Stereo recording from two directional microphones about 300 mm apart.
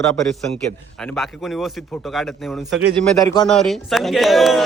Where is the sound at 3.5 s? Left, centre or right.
Centre.